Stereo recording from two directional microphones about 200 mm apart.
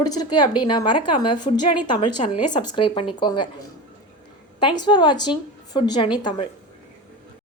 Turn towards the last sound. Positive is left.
turn(degrees=20)  # may be behind; listen again after turning